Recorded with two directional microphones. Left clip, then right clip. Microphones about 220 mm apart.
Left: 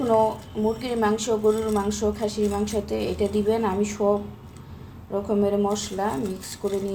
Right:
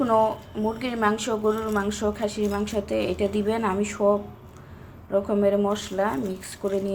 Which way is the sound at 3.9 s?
25° right (ahead or behind).